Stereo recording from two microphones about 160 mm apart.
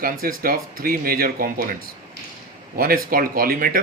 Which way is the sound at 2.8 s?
65° right (ahead or behind).